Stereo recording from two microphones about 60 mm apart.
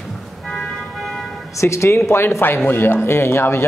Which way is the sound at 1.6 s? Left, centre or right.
Left.